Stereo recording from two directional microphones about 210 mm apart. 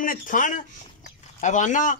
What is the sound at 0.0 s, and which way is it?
A man's voice, 40° left (ahead or behind).